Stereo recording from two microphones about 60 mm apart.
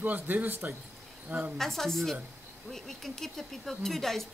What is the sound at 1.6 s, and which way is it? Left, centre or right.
A woman's voice, centre.